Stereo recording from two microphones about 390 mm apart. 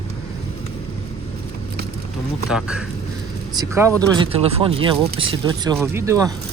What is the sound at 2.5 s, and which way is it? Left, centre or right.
Speech, centre.